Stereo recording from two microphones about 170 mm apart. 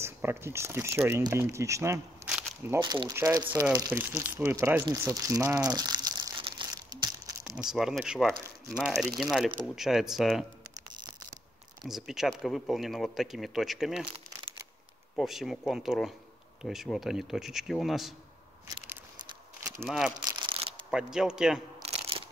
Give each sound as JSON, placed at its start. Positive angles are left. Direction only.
{"t": 0.0, "sound": "speech", "side_deg": -15}
{"t": 2.2, "sound": "a sound", "side_deg": -10}
{"t": 2.8, "sound": "speech", "side_deg": -25}
{"t": 4.2, "sound": "crumpling", "side_deg": -15}
{"t": 7.5, "sound": "speech", "side_deg": -5}
{"t": 11.8, "sound": "speech", "side_deg": 0}
{"t": 15.1, "sound": "speech", "side_deg": 0}
{"t": 19.8, "sound": "speech", "side_deg": 0}
{"t": 20.2, "sound": "shuffling cards", "side_deg": -30}
{"t": 20.9, "sound": "speech", "side_deg": -5}
{"t": 21.8, "sound": "a sound", "side_deg": -35}